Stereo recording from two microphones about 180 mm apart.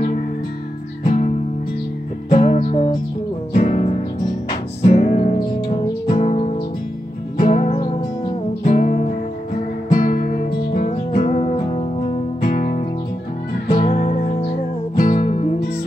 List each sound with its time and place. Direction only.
1.0 s music: 45° left (ahead or behind); by 8.4 s 30° left (ahead or behind)
8.6 s music: 45° left (ahead or behind)
11.0 s music: 40° left (ahead or behind)
12.4 s music: 50° left (ahead or behind)
13.7 s music: 30° left (ahead or behind)